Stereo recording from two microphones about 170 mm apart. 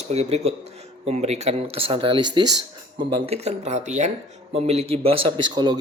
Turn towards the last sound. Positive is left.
turn(degrees=-25)  # may be behind; listen again after turning